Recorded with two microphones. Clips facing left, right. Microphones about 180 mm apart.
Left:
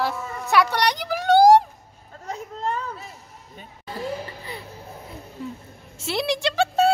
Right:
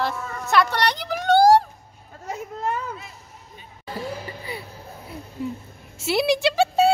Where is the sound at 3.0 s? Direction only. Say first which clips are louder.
Left 2 dB; 35° left (ahead or behind).